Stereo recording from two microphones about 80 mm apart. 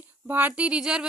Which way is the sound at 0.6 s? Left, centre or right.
Centre.